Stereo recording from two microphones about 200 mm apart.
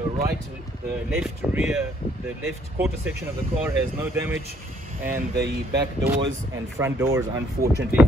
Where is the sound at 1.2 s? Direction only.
5° right (ahead or behind).